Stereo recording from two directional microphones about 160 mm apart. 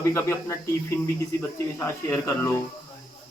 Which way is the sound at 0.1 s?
15° left (ahead or behind).